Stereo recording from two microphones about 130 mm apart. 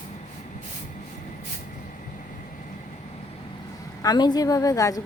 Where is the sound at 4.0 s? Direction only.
30° left (ahead or behind).